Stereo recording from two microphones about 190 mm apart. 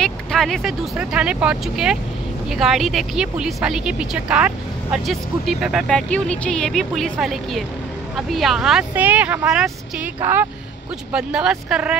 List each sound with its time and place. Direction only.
0.0 s speech: centre (ahead or behind)